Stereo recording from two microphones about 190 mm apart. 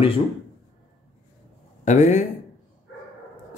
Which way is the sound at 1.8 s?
40° left (ahead or behind).